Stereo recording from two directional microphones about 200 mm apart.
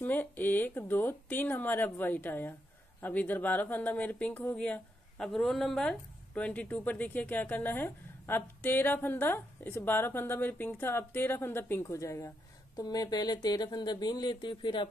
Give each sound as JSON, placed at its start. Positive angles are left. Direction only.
{"t": 0.0, "sound": "speech", "side_deg": 10}